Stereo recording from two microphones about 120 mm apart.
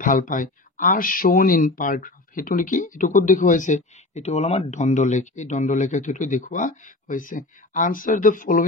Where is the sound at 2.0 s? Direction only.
90° left.